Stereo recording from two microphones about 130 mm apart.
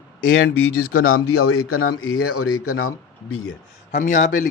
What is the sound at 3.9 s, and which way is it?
Speech, 75° left (ahead or behind).